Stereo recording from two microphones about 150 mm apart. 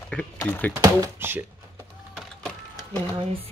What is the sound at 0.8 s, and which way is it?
Speech, 20° right (ahead or behind).